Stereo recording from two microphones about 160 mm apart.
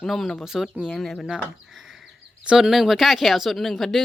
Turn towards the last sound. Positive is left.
turn(degrees=0)  # may be behind; listen again after turning